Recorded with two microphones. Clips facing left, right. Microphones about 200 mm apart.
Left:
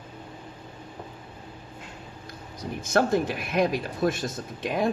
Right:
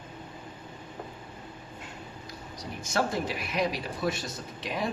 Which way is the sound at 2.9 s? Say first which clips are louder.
Left 6 dB; 50° left (ahead or behind).